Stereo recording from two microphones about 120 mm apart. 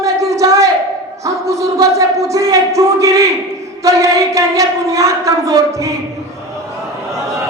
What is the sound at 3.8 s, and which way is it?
Speech, 25° right (ahead or behind).